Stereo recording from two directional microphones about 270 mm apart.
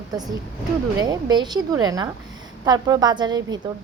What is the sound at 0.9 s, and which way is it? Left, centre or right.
A woman's voice, centre.